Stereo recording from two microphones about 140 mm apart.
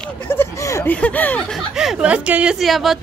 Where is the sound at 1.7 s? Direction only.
5° right (ahead or behind).